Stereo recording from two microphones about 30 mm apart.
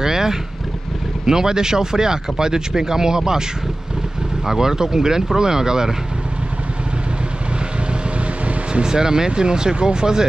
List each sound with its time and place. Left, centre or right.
0.0 s boat: centre
1.2 s speech: centre
4.5 s speech: centre
8.8 s speech: right